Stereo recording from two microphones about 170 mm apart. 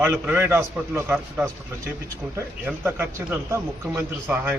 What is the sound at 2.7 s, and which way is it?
A man's voice, 10° right (ahead or behind).